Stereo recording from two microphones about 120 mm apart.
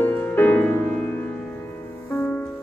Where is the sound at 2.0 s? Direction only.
15° left (ahead or behind).